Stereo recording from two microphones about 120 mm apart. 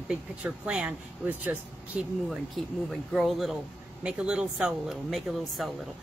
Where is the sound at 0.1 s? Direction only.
10° right (ahead or behind).